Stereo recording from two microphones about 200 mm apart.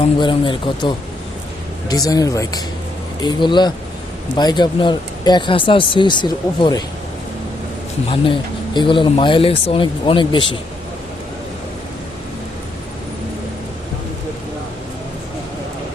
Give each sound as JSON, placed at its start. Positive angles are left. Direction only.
{"t": 0.0, "sound": "speech", "side_deg": 25}
{"t": 8.1, "sound": "speech", "side_deg": 25}